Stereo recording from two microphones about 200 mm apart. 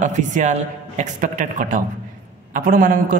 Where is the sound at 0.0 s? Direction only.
35° right (ahead or behind).